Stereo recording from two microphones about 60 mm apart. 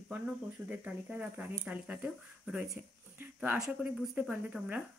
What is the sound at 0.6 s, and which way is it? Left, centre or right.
Speech, right.